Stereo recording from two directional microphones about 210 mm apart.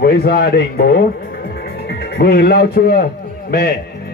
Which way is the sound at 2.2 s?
50° left (ahead or behind).